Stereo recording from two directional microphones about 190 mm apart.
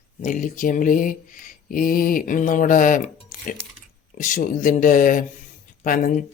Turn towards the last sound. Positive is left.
turn(degrees=45)  # may be behind; listen again after turning